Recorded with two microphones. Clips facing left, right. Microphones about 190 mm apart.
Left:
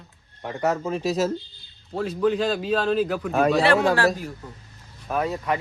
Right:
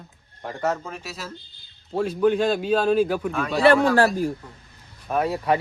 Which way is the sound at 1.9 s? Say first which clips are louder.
Right 2 dB; 25° right (ahead or behind).